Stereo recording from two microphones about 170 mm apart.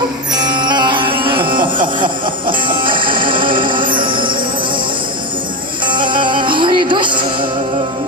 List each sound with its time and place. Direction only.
0.3 s music: 25° right (ahead or behind)
5.8 s music: 30° right (ahead or behind)